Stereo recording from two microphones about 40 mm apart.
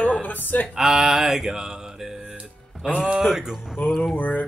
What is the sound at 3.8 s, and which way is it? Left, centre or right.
Music, left.